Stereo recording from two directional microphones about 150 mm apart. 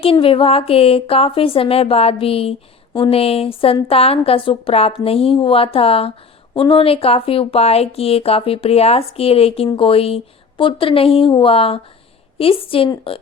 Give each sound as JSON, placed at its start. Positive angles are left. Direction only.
{"t": 0.0, "sound": "speech", "side_deg": 40}